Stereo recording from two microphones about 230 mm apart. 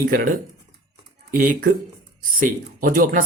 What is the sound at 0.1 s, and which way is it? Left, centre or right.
Speech, right.